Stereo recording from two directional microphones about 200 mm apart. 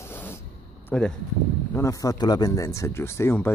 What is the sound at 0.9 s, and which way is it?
Speech, 5° left (ahead or behind).